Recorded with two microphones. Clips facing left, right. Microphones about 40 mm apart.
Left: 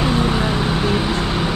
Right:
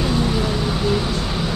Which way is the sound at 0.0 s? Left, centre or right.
Left.